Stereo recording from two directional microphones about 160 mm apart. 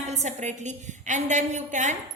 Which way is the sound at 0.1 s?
45° right (ahead or behind).